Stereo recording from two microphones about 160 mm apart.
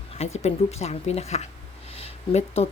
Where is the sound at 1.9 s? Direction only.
40° left (ahead or behind).